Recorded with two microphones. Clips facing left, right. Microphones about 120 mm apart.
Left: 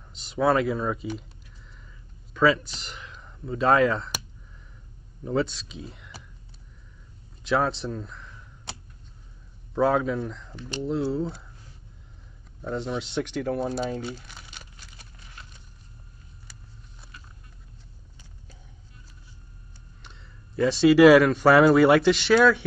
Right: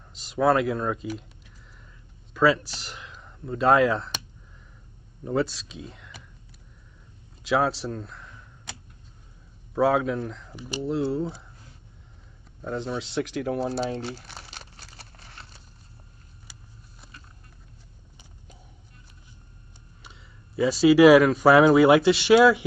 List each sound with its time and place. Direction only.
0.1 s speech: centre (ahead or behind)
2.3 s speech: 5° right (ahead or behind)
5.2 s speech: centre (ahead or behind)
7.4 s speech: 5° right (ahead or behind)
9.8 s speech: 5° right (ahead or behind)
12.6 s speech: centre (ahead or behind)
14.1 s crumpling: 35° right (ahead or behind)
15.1 s clip-clop: 35° right (ahead or behind)
20.0 s speech: 5° right (ahead or behind)